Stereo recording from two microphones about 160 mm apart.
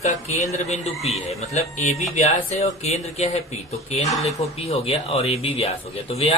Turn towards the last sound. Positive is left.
turn(degrees=40)  # may be behind; listen again after turning